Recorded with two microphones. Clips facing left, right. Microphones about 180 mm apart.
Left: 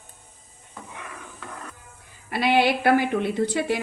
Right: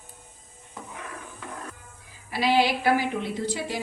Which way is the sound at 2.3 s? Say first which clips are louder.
Left 2 dB; 60° left (ahead or behind).